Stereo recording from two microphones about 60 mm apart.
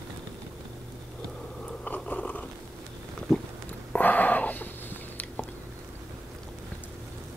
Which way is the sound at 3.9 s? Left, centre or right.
Left.